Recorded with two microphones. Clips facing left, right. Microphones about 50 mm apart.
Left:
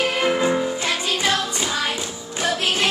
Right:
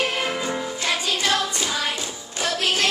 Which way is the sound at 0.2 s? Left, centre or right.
Left.